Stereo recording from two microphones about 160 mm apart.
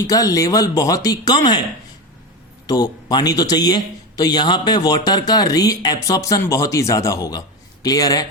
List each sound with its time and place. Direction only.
0.1 s a man's voice: 20° left (ahead or behind)
2.6 s a man's voice: 25° left (ahead or behind)